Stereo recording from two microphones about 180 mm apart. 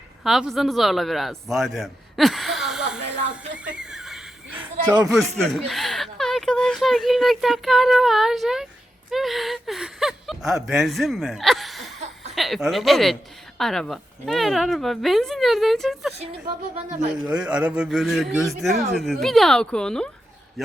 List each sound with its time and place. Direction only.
0.3 s a man's voice: centre (ahead or behind)
3.8 s chuckle: 5° right (ahead or behind)
5.4 s a woman's voice: centre (ahead or behind)
17.2 s a woman's voice: 5° right (ahead or behind)